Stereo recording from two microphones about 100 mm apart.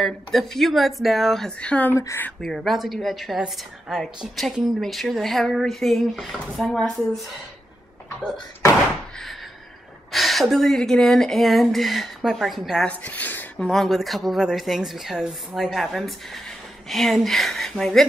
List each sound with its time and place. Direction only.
0.0 s a woman's voice: 5° left (ahead or behind)
2.0 s speech: 30° left (ahead or behind)
2.4 s a woman's voice: centre (ahead or behind)
10.1 s a woman's voice: centre (ahead or behind)
12.8 s speech: 15° left (ahead or behind)
13.6 s a woman's voice: 5° left (ahead or behind)